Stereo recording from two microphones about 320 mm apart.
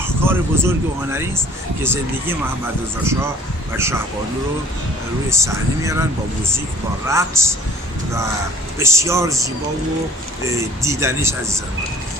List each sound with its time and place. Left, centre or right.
0.0 s speech: centre
3.7 s speech: centre
5.3 s speech: centre
7.1 s speech: centre
8.7 s speech: centre
10.8 s speech: centre